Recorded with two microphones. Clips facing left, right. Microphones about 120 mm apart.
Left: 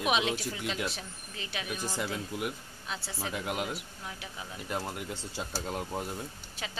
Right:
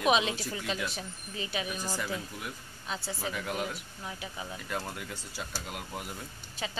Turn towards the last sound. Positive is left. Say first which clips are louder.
# left 5 dB
turn(degrees=30)  # may be behind; listen again after turning